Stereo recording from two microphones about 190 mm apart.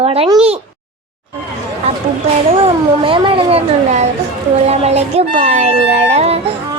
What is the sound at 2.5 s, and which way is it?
Speech, 30° right (ahead or behind).